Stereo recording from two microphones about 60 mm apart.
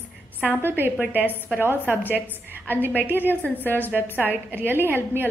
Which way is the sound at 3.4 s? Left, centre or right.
Left.